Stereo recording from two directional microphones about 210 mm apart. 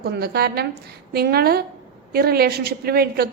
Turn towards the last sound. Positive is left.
turn(degrees=-45)  # may be behind; listen again after turning